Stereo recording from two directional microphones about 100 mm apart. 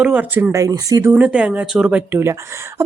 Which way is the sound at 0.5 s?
35° right (ahead or behind).